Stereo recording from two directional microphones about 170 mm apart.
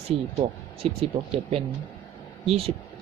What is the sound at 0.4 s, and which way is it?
Speech, 45° right (ahead or behind).